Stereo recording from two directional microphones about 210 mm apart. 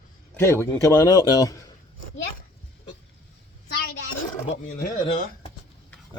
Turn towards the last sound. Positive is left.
turn(degrees=25)  # may be behind; listen again after turning